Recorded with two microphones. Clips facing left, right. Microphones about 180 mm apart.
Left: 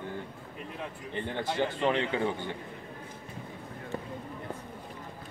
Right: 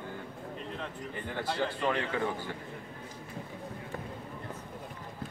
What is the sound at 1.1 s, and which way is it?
A man's voice, 20° left (ahead or behind).